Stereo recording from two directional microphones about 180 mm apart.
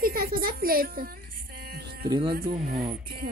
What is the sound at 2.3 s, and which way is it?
Speech, 55° right (ahead or behind).